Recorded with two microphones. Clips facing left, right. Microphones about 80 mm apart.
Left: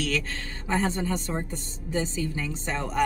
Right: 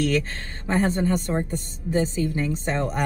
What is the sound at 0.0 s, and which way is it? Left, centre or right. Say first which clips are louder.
A woman's voice: right 6 dB; right.